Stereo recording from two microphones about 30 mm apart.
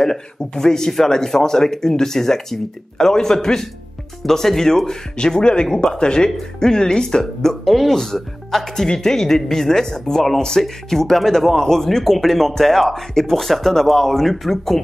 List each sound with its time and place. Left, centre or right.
0.0 s speech: centre
5.4 s speech: left
7.6 s speech: centre
7.9 s speech: centre
10.6 s speech: centre
13.3 s speech: centre